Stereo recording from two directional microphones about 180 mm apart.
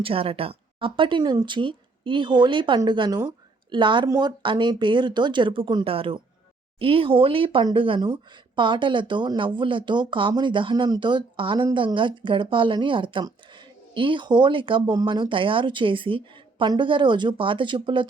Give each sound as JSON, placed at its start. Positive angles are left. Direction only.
{"t": 0.0, "sound": "speech", "side_deg": -30}